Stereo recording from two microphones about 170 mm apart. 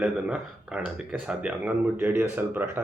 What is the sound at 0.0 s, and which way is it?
Speech, 10° right (ahead or behind).